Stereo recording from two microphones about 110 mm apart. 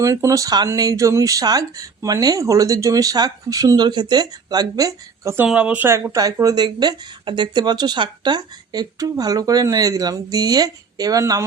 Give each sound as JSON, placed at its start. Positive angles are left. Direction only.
{"t": 0.0, "sound": "speech", "side_deg": -25}
{"t": 5.5, "sound": "speech", "side_deg": -10}
{"t": 6.1, "sound": "speech", "side_deg": -30}